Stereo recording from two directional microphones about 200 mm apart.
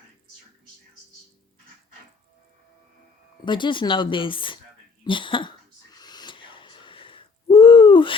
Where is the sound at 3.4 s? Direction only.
25° left (ahead or behind).